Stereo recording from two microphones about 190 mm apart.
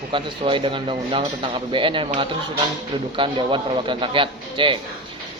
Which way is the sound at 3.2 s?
25° right (ahead or behind).